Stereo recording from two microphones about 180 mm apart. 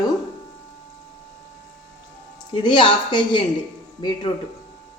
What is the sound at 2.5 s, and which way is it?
Speech, 25° left (ahead or behind).